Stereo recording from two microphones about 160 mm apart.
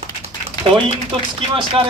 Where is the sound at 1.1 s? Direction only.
35° right (ahead or behind).